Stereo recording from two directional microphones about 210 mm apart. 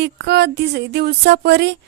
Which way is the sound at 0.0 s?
55° right (ahead or behind).